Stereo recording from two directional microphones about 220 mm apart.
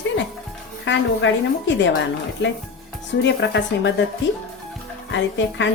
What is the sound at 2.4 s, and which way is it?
A woman's voice, 55° left (ahead or behind).